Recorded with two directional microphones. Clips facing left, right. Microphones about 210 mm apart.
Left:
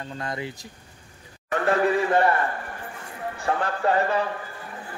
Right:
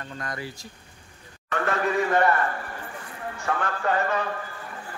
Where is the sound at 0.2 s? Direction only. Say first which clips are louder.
Left 3 dB; 25° left (ahead or behind).